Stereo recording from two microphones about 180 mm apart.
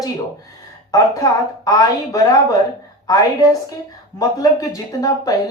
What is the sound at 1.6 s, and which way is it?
A woman's voice, 20° left (ahead or behind).